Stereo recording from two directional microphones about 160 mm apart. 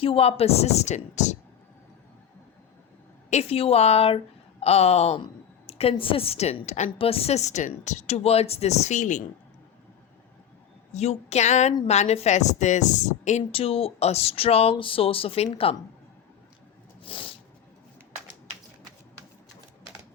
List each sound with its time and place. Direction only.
0.0 s a woman's voice: 35° left (ahead or behind)
3.2 s a woman's voice: 40° left (ahead or behind)
10.9 s a woman's voice: 40° left (ahead or behind)
17.0 s a sound: 35° left (ahead or behind)